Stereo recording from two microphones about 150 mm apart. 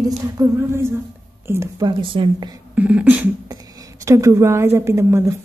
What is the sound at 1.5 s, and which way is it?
A woman's voice, 20° right (ahead or behind).